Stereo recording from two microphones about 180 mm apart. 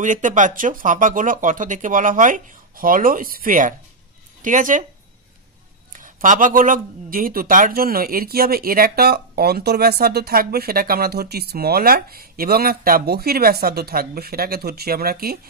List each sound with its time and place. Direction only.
0.0 s speech: 45° right (ahead or behind)
5.9 s speech: 45° right (ahead or behind)